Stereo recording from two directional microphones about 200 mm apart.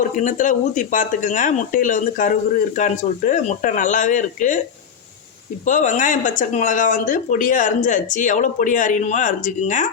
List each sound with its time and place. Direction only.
0.2 s speech: 40° left (ahead or behind)
5.6 s speech: 40° left (ahead or behind)